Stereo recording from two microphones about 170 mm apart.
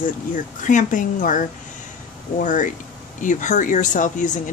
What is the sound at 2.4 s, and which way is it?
Speech, 50° left (ahead or behind).